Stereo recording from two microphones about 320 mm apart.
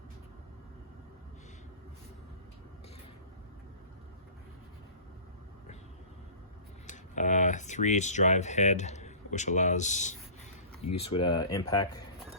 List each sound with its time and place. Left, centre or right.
6.8 s speech: left